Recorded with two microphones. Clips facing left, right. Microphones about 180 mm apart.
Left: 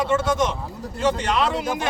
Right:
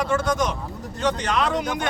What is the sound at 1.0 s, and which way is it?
Speech, 5° left (ahead or behind).